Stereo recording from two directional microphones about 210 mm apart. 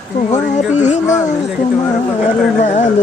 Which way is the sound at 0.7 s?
35° left (ahead or behind).